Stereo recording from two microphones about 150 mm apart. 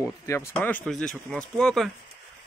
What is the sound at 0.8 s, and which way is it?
Speech, 5° left (ahead or behind).